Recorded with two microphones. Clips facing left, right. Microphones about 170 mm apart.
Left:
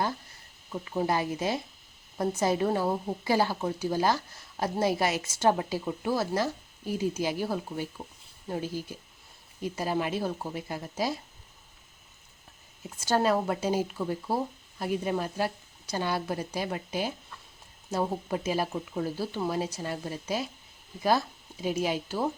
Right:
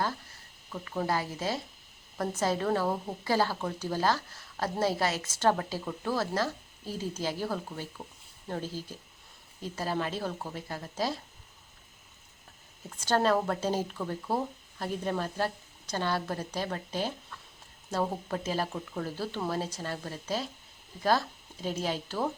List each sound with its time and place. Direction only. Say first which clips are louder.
0.7 s a woman's voice: left 3 dB; 15° left (ahead or behind)
13.0 s a woman's voice: left 1 dB; 10° left (ahead or behind)